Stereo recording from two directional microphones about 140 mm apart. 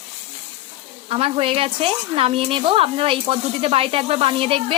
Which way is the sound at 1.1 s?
45° right (ahead or behind).